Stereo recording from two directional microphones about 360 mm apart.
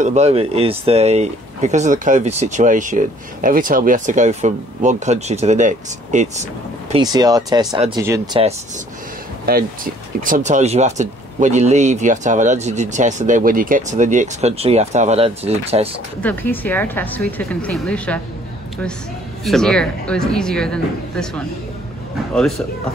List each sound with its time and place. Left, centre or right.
0.0 s speech: centre
9.5 s speech: right
16.2 s a woman's voice: centre
19.4 s a woman's voice: centre